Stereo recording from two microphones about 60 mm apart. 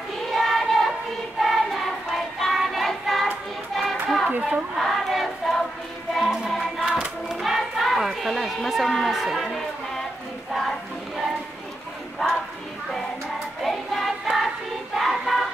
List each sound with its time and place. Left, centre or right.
0.3 s child singing: centre
1.4 s music: centre
3.7 s hands: centre
4.4 s speech: centre
4.8 s choir: centre
6.2 s music: centre
6.5 s choir: centre
6.9 s hands: centre
7.3 s a sound: centre
10.5 s choir: centre
12.2 s a sound: centre
13.6 s choir: centre